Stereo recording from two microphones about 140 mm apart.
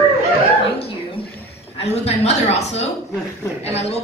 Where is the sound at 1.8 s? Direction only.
50° left (ahead or behind).